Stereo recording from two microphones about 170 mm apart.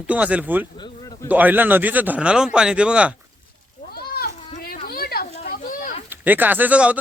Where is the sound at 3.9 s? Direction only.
65° left (ahead or behind).